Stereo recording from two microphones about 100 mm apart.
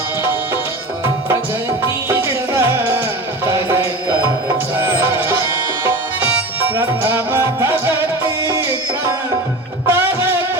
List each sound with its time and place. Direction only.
1.8 s music: 25° right (ahead or behind)
5.8 s tabla: 20° right (ahead or behind)
9.8 s music: 25° right (ahead or behind)